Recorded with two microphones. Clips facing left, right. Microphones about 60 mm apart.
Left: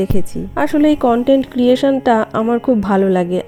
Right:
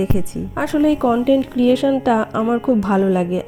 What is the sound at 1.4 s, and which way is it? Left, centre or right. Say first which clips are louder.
Speech: left 3 dB; left.